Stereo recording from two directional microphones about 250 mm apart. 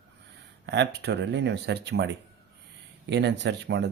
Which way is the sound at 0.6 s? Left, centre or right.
Right.